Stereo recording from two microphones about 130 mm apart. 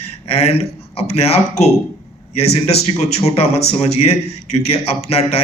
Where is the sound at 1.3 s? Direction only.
55° left (ahead or behind).